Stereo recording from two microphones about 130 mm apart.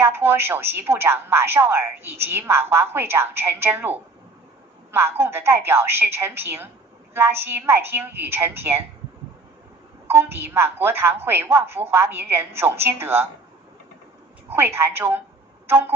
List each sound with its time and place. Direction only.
0.0 s a woman's voice: 15° right (ahead or behind)
10.0 s a woman's voice: 15° right (ahead or behind)
14.5 s a woman's voice: 15° right (ahead or behind)